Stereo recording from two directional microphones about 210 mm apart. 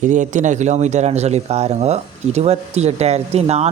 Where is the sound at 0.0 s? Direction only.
35° right (ahead or behind).